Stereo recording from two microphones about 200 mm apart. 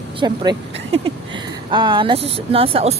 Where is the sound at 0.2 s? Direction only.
20° right (ahead or behind).